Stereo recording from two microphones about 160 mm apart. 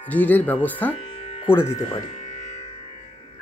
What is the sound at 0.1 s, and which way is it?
Speech, 10° left (ahead or behind).